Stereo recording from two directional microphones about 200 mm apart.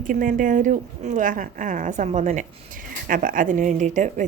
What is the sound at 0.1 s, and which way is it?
A woman's voice, 40° right (ahead or behind).